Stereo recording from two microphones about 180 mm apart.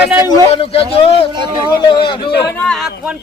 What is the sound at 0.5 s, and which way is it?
A man's voice, 35° left (ahead or behind).